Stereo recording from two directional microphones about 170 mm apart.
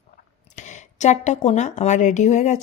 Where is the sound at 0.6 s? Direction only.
45° left (ahead or behind).